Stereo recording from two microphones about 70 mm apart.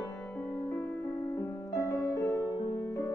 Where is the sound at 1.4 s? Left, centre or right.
Left.